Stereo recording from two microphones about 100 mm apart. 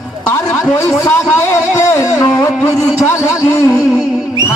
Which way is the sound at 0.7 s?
30° left (ahead or behind).